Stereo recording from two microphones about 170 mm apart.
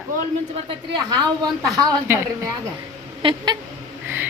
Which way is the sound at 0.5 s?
30° right (ahead or behind).